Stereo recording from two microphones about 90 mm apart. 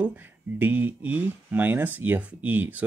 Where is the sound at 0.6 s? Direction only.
20° right (ahead or behind).